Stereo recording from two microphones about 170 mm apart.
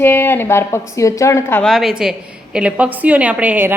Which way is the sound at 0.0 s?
15° left (ahead or behind).